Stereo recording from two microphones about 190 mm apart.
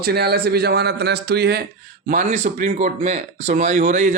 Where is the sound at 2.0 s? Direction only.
40° right (ahead or behind).